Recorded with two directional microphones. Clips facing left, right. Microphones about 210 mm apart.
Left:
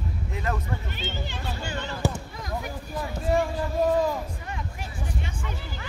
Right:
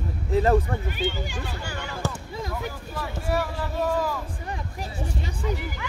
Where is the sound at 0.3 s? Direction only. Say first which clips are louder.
Right 11 dB; 30° right (ahead or behind).